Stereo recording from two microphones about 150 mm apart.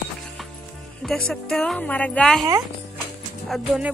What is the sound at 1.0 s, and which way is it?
Speech, 5° left (ahead or behind).